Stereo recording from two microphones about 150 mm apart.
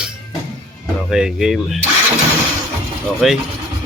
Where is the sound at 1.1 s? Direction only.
5° right (ahead or behind).